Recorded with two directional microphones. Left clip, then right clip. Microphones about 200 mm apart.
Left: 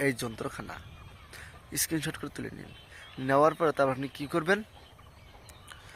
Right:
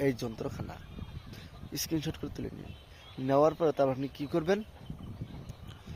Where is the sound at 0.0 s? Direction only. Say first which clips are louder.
Left 2 dB; 5° right (ahead or behind).